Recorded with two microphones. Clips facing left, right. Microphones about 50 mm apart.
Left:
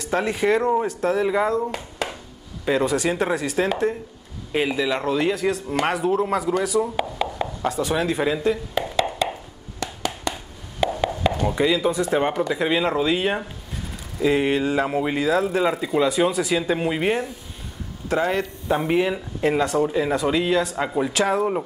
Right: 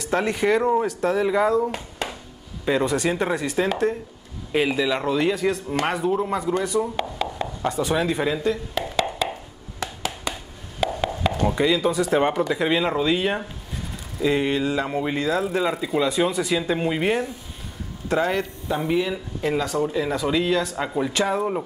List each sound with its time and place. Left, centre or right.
0.0 s speech: centre
2.6 s speech: centre
10.8 s a sound: centre
11.4 s speech: centre
15.1 s a man's voice: centre
18.7 s speech: left
20.7 s speech: centre